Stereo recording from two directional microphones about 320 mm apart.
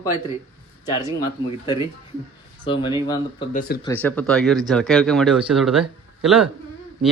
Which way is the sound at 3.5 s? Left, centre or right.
Left.